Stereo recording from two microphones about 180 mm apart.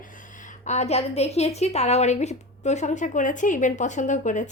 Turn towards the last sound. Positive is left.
turn(degrees=45)  # may be behind; listen again after turning